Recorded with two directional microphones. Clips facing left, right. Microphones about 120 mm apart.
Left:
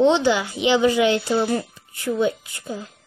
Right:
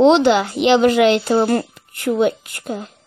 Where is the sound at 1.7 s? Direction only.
70° right (ahead or behind).